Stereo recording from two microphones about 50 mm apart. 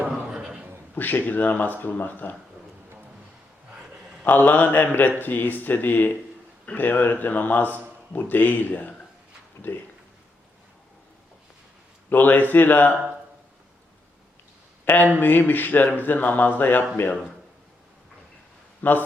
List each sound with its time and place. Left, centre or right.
0.1 s a sound: centre
0.9 s speech: left
3.8 s a sound: centre
4.2 s speech: left
9.7 s speech: left
12.1 s speech: left
14.8 s speech: left
18.8 s speech: left